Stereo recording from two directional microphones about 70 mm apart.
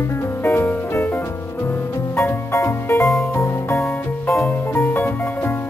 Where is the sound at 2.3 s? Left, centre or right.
Left.